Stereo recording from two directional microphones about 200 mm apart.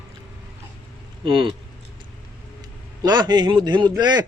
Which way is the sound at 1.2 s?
25° right (ahead or behind).